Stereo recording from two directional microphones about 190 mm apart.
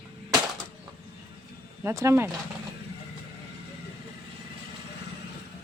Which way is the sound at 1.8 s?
15° right (ahead or behind).